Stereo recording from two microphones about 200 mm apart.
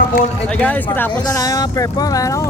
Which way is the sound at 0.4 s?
5° left (ahead or behind).